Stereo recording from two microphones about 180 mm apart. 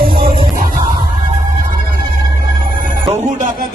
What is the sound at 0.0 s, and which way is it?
Music, 30° right (ahead or behind).